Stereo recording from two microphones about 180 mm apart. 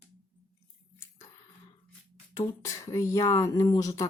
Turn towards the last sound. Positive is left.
turn(degrees=20)  # may be behind; listen again after turning